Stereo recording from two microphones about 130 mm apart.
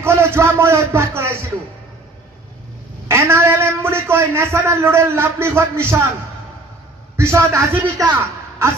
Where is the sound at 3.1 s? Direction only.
20° right (ahead or behind).